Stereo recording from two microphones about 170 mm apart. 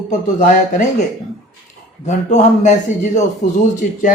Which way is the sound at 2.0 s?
45° left (ahead or behind).